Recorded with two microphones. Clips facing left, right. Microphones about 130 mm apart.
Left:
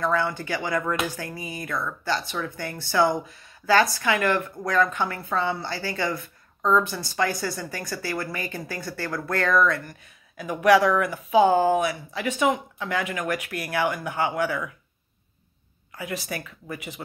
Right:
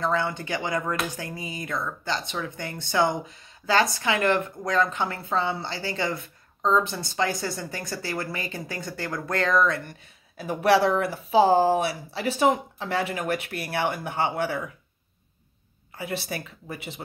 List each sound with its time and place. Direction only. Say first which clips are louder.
0.0 s speech: left 1 dB; 25° right (ahead or behind)
16.0 s speech: even; 30° right (ahead or behind)